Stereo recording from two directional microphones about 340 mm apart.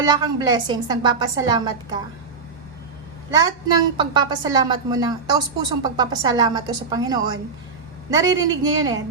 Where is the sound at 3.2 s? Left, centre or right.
Centre.